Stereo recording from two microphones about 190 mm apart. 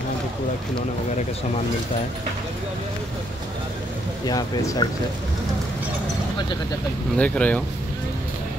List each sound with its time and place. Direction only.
4.3 s speech: 20° left (ahead or behind)
7.2 s speech: 5° left (ahead or behind)